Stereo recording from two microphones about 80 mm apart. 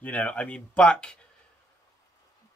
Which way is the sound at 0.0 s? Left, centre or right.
Centre.